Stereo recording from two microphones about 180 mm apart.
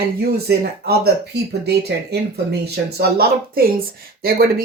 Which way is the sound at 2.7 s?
60° right (ahead or behind).